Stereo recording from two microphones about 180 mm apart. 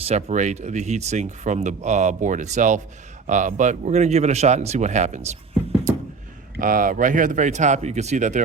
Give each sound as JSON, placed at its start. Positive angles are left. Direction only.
{"t": 0.1, "sound": "speech", "side_deg": -40}
{"t": 6.6, "sound": "speech", "side_deg": -50}